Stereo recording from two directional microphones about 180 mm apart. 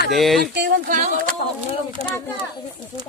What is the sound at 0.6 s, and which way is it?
Speech, 45° right (ahead or behind).